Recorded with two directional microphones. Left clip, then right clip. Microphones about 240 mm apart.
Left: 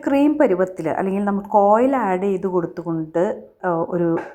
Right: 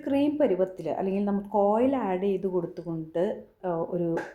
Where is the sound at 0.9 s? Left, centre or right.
Centre.